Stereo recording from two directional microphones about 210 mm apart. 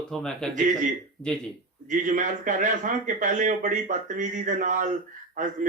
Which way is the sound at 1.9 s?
35° right (ahead or behind).